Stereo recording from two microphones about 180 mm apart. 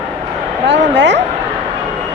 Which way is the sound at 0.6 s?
75° right (ahead or behind).